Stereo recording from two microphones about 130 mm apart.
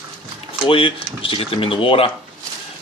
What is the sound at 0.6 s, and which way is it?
Speech, 45° left (ahead or behind).